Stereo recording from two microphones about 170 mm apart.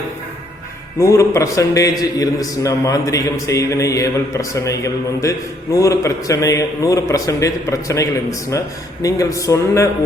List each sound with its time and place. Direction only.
0.9 s a man's voice: 15° left (ahead or behind)